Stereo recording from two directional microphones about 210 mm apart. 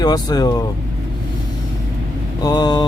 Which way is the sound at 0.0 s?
20° left (ahead or behind).